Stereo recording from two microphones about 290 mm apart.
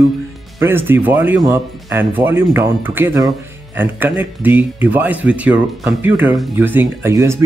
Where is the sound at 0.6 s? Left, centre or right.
Centre.